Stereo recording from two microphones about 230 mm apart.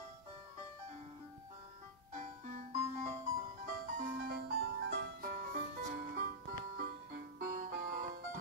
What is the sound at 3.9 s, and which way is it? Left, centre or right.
Music, right.